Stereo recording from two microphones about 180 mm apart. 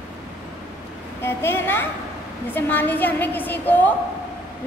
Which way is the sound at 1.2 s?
15° left (ahead or behind).